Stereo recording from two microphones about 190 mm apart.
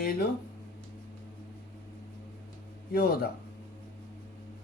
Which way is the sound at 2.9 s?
50° left (ahead or behind).